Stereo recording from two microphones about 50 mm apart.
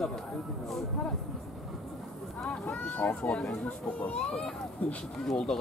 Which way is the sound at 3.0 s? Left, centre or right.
Centre.